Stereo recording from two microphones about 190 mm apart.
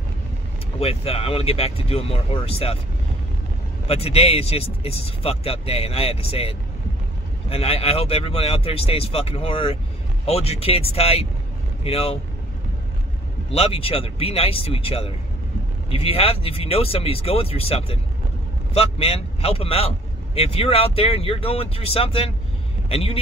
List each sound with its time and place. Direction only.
0.7 s speech: 30° left (ahead or behind)
3.8 s speech: 30° left (ahead or behind)
13.5 s a man's voice: 30° left (ahead or behind)